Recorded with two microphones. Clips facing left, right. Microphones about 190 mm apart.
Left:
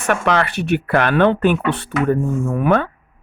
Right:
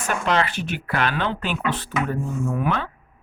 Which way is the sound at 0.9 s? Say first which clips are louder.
Left 9 dB; 55° left (ahead or behind).